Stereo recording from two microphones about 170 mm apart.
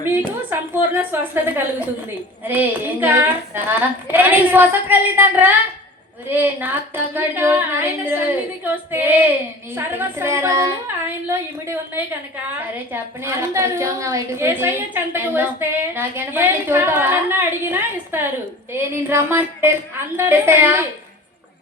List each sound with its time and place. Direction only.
0.7 s a woman's voice: 10° right (ahead or behind)